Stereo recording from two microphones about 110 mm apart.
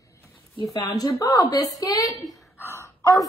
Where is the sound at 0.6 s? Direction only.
35° left (ahead or behind).